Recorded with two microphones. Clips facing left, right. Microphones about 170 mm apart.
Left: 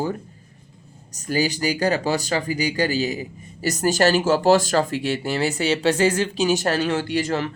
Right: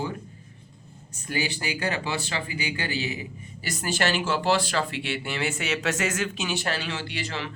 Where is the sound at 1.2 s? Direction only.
40° left (ahead or behind).